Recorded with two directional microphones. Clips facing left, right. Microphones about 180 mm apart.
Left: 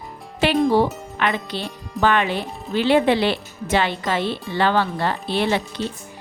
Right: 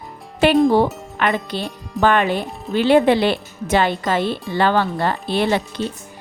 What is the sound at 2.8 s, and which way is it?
A woman's voice, 45° right (ahead or behind).